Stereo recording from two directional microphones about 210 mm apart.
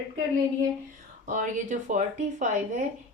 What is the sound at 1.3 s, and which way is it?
A woman's voice, 35° right (ahead or behind).